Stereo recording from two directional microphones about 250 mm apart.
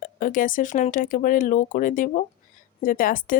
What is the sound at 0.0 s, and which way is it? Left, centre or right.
Speech, left.